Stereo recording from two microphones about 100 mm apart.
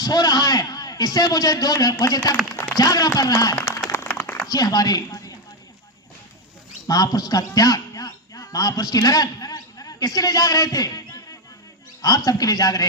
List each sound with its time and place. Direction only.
0.0 s a man's voice: 40° left (ahead or behind)
3.8 s a sound: 30° left (ahead or behind)
4.4 s speech: 40° left (ahead or behind)
6.8 s a man's voice: 40° left (ahead or behind)